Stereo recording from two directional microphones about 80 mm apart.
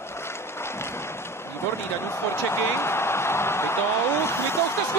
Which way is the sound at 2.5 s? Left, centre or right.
Left.